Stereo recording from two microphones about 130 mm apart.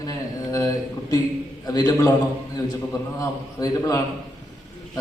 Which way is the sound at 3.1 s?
25° left (ahead or behind).